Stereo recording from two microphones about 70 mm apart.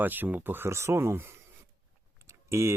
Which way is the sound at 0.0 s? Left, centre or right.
Right.